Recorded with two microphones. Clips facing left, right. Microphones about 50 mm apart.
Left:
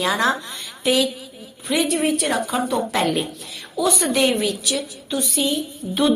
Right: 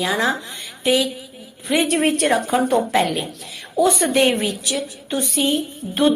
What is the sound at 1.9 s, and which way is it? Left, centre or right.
Speech, right.